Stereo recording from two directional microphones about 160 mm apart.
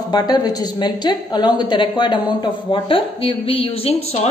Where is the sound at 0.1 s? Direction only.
25° left (ahead or behind).